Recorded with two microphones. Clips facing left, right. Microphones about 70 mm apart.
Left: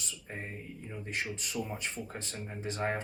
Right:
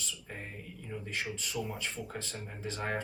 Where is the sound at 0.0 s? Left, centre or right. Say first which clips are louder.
Left 1 dB; left.